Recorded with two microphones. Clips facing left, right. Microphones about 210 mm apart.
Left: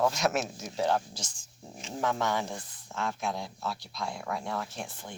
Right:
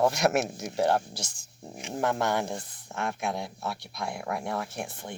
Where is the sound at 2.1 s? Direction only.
10° right (ahead or behind).